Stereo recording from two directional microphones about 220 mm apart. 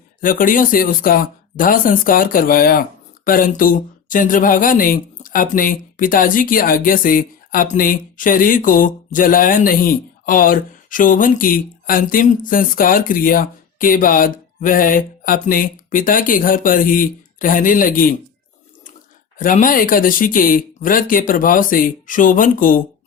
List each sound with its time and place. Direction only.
0.2 s speech: 40° left (ahead or behind)
19.4 s speech: 40° left (ahead or behind)